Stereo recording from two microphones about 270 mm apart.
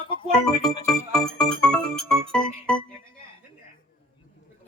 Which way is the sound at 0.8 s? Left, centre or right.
Centre.